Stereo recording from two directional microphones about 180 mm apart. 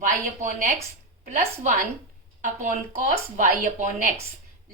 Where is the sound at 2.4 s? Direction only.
45° right (ahead or behind).